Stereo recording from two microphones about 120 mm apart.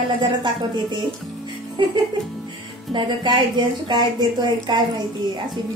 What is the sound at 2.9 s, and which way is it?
Speech, 40° right (ahead or behind).